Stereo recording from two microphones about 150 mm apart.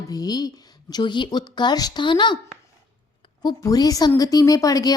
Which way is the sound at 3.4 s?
25° left (ahead or behind).